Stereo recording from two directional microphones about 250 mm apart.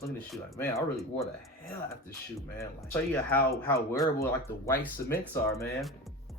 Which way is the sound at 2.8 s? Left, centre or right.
Centre.